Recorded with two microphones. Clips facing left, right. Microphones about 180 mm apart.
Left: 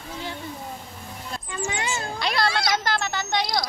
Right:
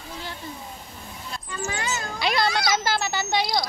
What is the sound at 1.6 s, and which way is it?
Speech, 25° left (ahead or behind).